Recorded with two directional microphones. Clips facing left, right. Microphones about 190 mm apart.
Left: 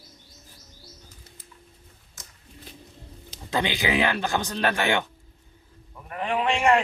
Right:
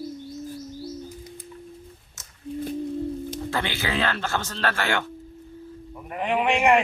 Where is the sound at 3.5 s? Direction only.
15° left (ahead or behind).